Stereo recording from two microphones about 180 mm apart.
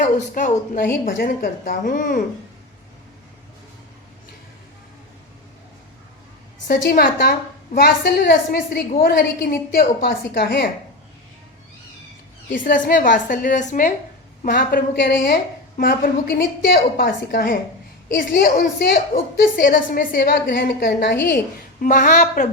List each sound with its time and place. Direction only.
0.0 s a woman's voice: 45° left (ahead or behind)
0.9 s a woman's voice: 55° left (ahead or behind)
6.7 s a woman's voice: 60° left (ahead or behind)
12.5 s a woman's voice: 50° left (ahead or behind)